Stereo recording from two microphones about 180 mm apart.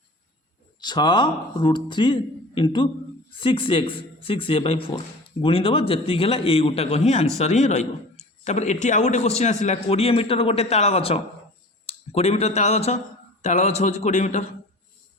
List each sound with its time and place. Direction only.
0.8 s a man's voice: 25° left (ahead or behind); by 14.4 s 40° left (ahead or behind)